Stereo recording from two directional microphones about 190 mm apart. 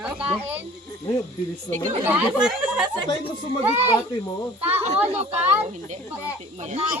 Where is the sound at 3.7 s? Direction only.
35° right (ahead or behind).